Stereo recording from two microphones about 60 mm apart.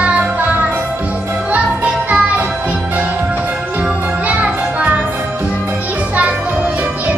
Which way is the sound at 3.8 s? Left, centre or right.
Centre.